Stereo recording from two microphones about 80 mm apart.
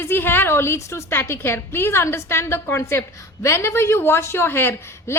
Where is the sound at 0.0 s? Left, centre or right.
Left.